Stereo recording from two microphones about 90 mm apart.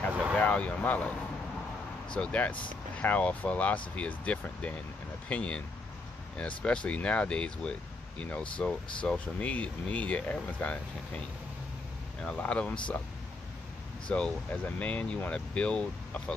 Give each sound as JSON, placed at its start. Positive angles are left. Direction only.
{"t": 0.1, "sound": "vehicle", "side_deg": -15}
{"t": 0.4, "sound": "speech", "side_deg": 15}
{"t": 2.1, "sound": "speech", "side_deg": 15}
{"t": 6.6, "sound": "speech", "side_deg": 10}
{"t": 14.0, "sound": "speech", "side_deg": 10}